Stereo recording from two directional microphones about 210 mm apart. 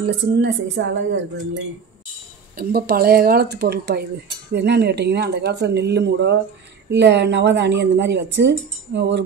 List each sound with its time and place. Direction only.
0.0 s speech: 60° right (ahead or behind)
2.5 s speech: 50° right (ahead or behind)